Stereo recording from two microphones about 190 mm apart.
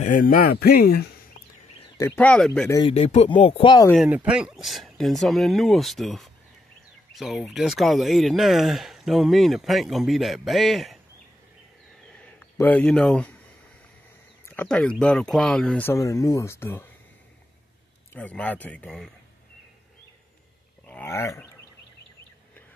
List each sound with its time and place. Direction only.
0.0 s speech: 45° left (ahead or behind)
2.0 s speech: 10° left (ahead or behind)
2.9 s speech: 30° left (ahead or behind)
3.9 s speech: 5° right (ahead or behind)
12.4 s speech: 10° left (ahead or behind)
14.4 s speech: 10° left (ahead or behind)
18.1 s speech: 5° left (ahead or behind)
20.8 s a sound: 10° left (ahead or behind)